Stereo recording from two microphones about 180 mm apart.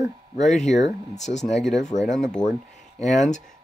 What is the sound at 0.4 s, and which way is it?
Speech, 40° left (ahead or behind).